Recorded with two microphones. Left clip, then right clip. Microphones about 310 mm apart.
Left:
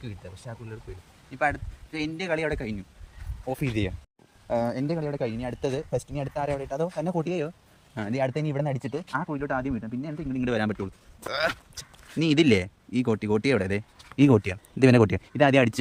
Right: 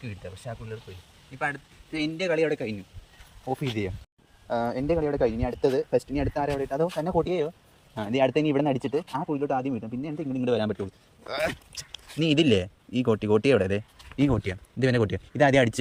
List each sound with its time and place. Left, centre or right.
1.4 s speech: centre
3.8 s speech: centre
9.1 s speech: centre
11.8 s speech: centre
14.1 s speech: centre